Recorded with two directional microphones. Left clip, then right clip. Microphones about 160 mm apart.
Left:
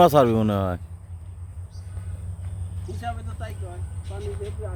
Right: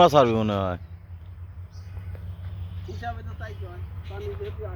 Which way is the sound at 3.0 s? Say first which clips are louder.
Left 2 dB; 20° right (ahead or behind).